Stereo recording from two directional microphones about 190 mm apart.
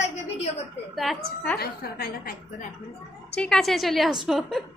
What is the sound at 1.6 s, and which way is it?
Speech, 55° left (ahead or behind).